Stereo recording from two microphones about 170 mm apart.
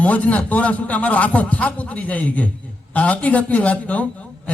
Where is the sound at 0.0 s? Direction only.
10° left (ahead or behind).